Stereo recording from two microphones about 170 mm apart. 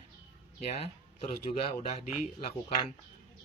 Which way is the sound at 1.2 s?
35° left (ahead or behind).